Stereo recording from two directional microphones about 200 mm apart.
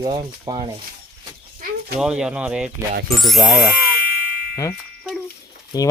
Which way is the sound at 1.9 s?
5° right (ahead or behind).